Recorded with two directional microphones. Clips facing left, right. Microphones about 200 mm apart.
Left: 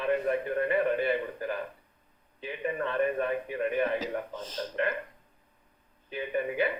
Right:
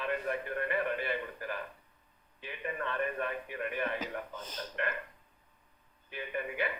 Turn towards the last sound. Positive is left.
turn(degrees=30)  # may be behind; listen again after turning